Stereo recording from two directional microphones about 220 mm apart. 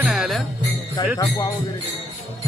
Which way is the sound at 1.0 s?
20° left (ahead or behind).